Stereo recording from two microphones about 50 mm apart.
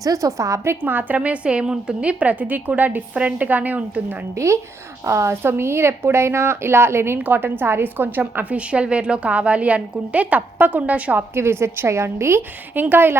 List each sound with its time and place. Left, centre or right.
0.2 s a woman's voice: right
0.9 s a woman's voice: right
4.4 s a woman's voice: right
5.3 s a woman's voice: right
7.2 s a woman's voice: right
11.2 s a woman's voice: right